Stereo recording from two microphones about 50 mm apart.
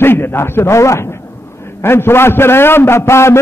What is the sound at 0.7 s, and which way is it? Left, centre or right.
Speech, left.